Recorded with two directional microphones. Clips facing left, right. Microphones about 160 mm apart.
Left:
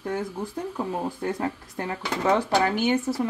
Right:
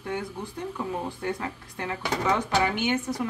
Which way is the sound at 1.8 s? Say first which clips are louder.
Right 1 dB; 30° left (ahead or behind).